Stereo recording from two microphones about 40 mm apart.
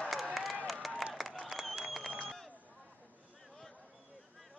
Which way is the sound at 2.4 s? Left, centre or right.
Right.